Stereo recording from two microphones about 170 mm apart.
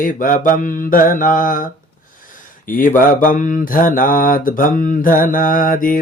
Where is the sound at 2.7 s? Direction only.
55° left (ahead or behind).